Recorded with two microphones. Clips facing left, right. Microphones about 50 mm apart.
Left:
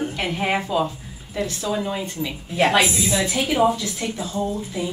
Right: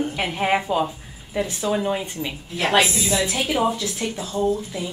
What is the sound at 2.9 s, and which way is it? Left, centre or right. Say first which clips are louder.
Speech: left 1 dB; centre.